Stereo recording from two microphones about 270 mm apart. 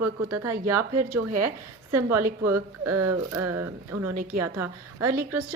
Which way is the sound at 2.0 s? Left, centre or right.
Centre.